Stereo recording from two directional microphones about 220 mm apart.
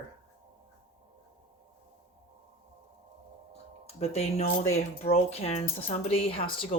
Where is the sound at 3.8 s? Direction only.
30° left (ahead or behind).